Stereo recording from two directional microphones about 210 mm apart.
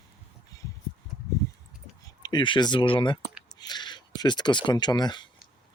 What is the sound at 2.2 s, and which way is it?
Speech, 20° left (ahead or behind).